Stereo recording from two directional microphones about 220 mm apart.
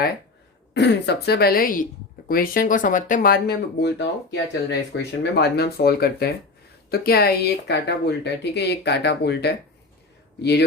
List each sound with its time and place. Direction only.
0.7 s speech: 50° left (ahead or behind)